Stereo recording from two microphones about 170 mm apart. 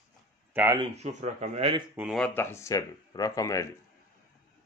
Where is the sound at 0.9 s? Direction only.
40° right (ahead or behind).